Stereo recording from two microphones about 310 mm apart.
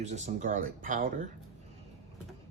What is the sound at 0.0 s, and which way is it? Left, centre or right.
Speech, right.